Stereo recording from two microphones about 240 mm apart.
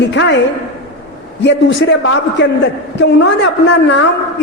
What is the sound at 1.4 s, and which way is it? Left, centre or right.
A man's voice, left.